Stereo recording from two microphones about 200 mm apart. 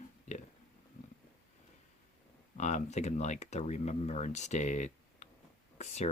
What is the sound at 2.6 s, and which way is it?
Speech, 35° left (ahead or behind).